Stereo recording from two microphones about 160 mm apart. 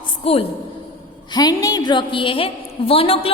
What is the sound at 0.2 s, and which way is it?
Speech, 40° left (ahead or behind).